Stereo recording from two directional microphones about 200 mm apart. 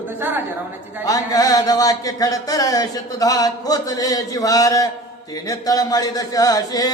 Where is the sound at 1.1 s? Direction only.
20° left (ahead or behind).